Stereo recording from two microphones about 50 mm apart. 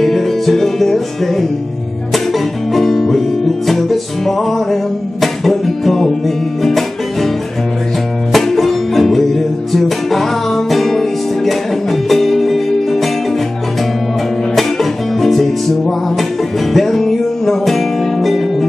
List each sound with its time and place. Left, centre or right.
0.0 s music: centre
8.3 s music: centre
14.5 s music: centre